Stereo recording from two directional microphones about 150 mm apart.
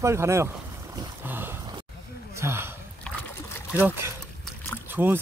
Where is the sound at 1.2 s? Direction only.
15° right (ahead or behind).